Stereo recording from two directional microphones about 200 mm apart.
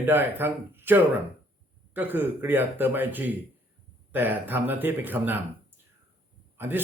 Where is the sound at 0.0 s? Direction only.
10° right (ahead or behind).